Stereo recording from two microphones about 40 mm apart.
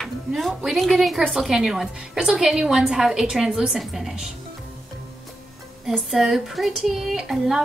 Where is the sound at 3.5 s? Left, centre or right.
Right.